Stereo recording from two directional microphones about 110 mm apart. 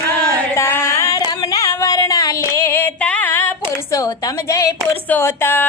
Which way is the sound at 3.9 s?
30° left (ahead or behind).